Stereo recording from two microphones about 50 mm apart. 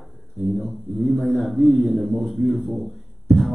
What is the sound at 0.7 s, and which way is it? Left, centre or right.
A man's voice, centre.